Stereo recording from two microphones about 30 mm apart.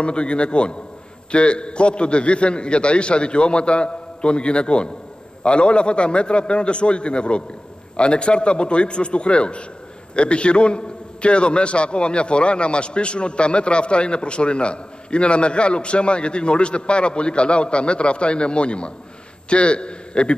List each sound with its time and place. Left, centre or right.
0.0 s a man's voice: left